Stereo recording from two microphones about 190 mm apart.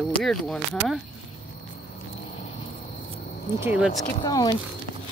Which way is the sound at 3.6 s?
5° right (ahead or behind).